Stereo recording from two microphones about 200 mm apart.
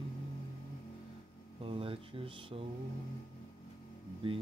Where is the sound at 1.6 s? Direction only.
25° right (ahead or behind).